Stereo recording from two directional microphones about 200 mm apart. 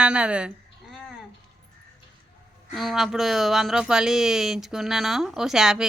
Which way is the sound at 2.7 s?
Centre (ahead or behind).